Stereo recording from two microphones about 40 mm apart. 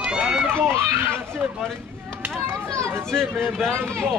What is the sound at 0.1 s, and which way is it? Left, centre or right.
Run, centre.